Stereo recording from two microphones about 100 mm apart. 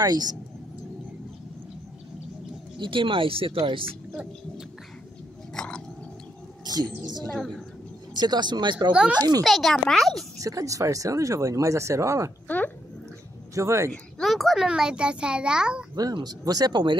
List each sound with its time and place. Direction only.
0.0 s speech: 40° right (ahead or behind)
2.8 s speech: 55° right (ahead or behind)
5.5 s a sound: 5° left (ahead or behind)
6.6 s speech: 40° right (ahead or behind)
7.2 s a woman's voice: 10° left (ahead or behind)
8.2 s speech: 45° right (ahead or behind)
8.9 s a child's voice: 10° right (ahead or behind)
9.4 s a child's voice: centre (ahead or behind)
10.4 s speech: 35° right (ahead or behind)
12.4 s a sound: 15° left (ahead or behind)
13.6 s speech: 30° right (ahead or behind)
14.1 s a child's voice: centre (ahead or behind)
15.9 s speech: 40° right (ahead or behind)